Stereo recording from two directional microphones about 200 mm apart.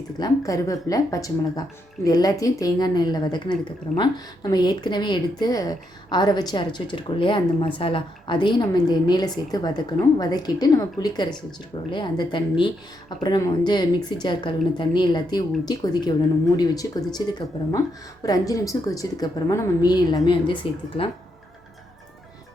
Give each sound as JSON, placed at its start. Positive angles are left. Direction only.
{"t": 0.2, "sound": "a woman's voice", "side_deg": 15}